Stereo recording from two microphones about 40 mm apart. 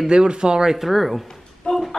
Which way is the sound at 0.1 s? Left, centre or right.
Right.